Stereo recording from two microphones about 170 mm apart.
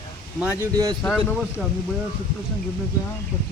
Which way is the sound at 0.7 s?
25° right (ahead or behind).